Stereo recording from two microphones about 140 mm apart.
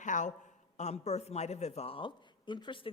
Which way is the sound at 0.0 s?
65° left (ahead or behind).